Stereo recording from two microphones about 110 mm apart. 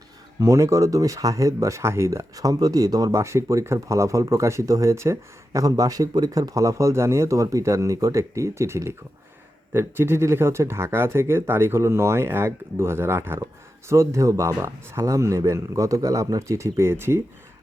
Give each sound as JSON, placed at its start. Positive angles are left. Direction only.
{"t": 0.3, "sound": "speech", "side_deg": -30}